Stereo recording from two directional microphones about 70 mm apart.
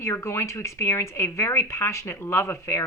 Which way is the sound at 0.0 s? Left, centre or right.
Left.